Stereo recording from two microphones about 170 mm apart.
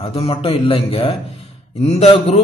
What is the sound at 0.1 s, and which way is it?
Speech, 35° left (ahead or behind).